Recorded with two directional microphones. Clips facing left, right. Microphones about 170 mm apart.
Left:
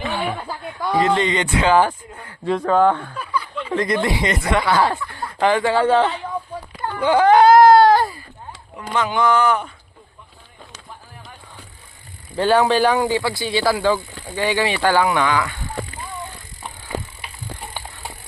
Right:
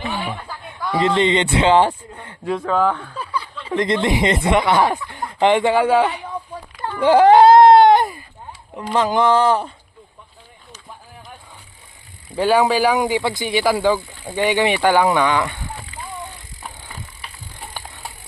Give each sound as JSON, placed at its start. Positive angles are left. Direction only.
{"t": 0.9, "sound": "speech", "side_deg": -25}
{"t": 2.5, "sound": "speech", "side_deg": 0}
{"t": 3.2, "sound": "a sound", "side_deg": -30}
{"t": 3.8, "sound": "speech", "side_deg": -25}
{"t": 7.0, "sound": "baby cry", "side_deg": -30}
{"t": 8.7, "sound": "speech", "side_deg": -30}
{"t": 12.4, "sound": "speech", "side_deg": -10}